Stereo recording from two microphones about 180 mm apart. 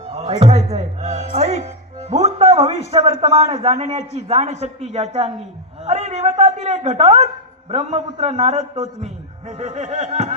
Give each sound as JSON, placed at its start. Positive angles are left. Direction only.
{"t": 0.1, "sound": "a man's voice", "side_deg": -35}